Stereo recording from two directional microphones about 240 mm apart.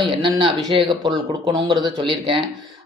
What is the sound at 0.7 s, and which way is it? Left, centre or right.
Speech, centre.